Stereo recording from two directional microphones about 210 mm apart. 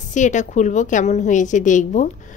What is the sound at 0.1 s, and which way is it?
A woman's voice, 35° left (ahead or behind).